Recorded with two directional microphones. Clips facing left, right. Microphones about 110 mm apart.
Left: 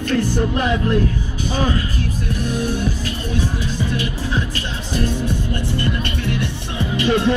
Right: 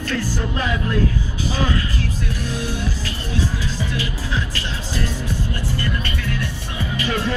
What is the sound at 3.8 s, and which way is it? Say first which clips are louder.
Speech: left 3 dB; 20° left (ahead or behind).